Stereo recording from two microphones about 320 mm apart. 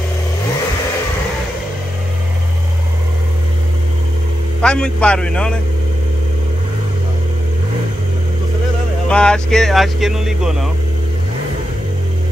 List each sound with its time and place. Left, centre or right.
4.6 s speech: centre
9.1 s speech: centre